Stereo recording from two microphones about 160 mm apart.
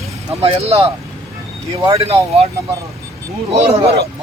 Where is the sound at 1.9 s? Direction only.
35° right (ahead or behind).